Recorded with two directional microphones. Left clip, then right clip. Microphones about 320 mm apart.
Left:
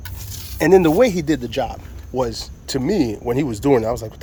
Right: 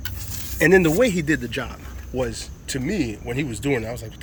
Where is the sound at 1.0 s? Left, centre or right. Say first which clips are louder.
Left 3 dB; centre.